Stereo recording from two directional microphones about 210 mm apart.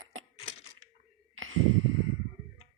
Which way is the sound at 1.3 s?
75° right (ahead or behind).